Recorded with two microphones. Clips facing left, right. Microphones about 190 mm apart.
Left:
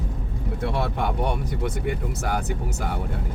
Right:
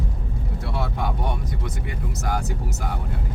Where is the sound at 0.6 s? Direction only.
60° left (ahead or behind).